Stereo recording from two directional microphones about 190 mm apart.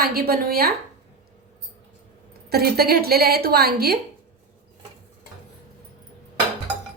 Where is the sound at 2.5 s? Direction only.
55° right (ahead or behind).